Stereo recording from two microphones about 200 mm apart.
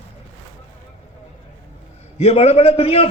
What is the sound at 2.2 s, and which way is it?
Speech, 30° left (ahead or behind).